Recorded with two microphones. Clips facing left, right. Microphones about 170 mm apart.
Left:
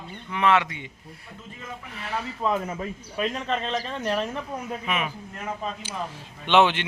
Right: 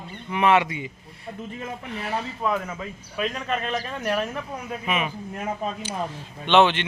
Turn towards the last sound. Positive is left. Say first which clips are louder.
# right 2 dB
turn(degrees=10)  # may be behind; listen again after turning